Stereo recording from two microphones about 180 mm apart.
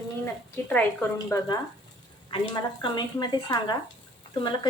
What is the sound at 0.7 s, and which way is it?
Speech, 5° left (ahead or behind).